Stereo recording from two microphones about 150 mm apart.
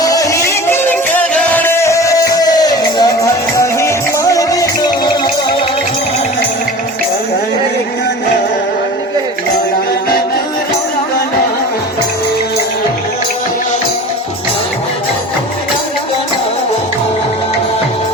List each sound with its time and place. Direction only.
0.0 s music: 25° left (ahead or behind)